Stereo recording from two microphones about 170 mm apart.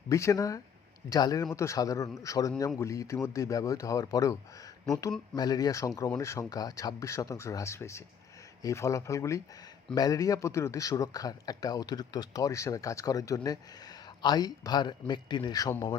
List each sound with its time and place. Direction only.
0.1 s speech: 20° left (ahead or behind)